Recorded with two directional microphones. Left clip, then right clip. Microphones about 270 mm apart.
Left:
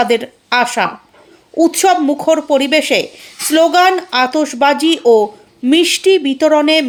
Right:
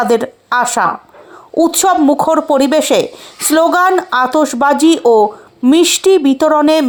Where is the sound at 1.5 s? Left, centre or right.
Centre.